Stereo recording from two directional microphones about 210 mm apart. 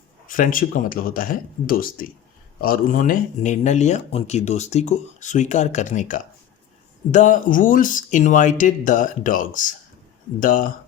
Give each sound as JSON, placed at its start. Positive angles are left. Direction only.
{"t": 0.3, "sound": "speech", "side_deg": 40}